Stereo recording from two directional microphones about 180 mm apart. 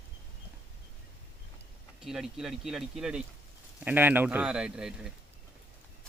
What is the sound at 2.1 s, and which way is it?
Speech, 5° right (ahead or behind).